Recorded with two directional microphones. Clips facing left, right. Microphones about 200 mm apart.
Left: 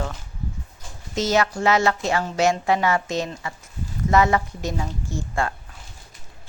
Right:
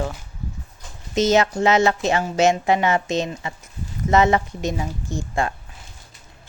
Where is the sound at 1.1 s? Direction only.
20° right (ahead or behind).